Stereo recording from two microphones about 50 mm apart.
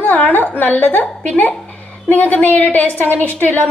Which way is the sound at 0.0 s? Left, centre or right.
Left.